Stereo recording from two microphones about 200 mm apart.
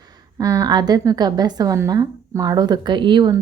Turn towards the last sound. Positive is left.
turn(degrees=-25)  # may be behind; listen again after turning